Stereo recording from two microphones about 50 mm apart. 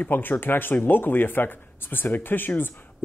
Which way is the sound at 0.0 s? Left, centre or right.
Left.